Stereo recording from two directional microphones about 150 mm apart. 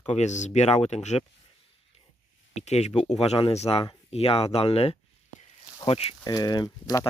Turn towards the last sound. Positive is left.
turn(degrees=25)  # may be behind; listen again after turning